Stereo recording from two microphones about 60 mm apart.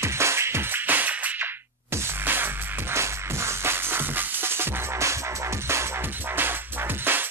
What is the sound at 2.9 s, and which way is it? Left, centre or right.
Music, right.